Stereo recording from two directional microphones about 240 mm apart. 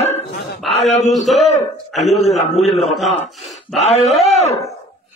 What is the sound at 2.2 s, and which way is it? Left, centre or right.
Speech, left.